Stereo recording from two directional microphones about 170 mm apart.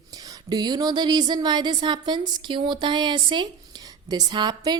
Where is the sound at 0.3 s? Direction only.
25° right (ahead or behind).